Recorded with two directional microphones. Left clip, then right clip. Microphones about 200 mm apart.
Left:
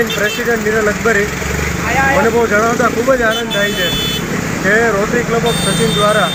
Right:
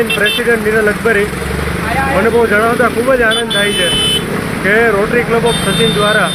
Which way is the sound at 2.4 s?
15° right (ahead or behind).